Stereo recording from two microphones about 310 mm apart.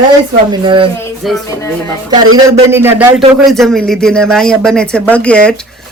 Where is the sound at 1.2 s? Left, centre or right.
Centre.